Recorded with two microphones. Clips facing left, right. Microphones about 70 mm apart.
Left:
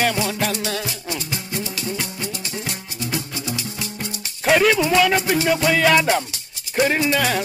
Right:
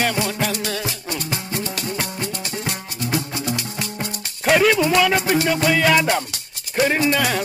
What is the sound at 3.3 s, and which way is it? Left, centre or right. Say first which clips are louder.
Music: right 3 dB; right.